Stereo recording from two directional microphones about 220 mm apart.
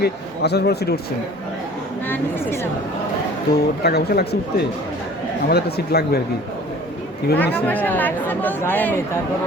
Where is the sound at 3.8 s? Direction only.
45° left (ahead or behind).